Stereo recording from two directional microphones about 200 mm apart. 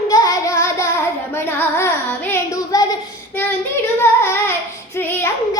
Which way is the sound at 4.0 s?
10° left (ahead or behind).